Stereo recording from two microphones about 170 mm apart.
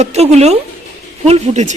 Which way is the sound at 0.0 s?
40° right (ahead or behind).